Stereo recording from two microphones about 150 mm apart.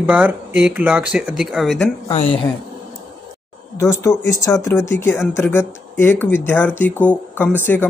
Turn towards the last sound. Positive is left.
turn(degrees=10)  # may be behind; listen again after turning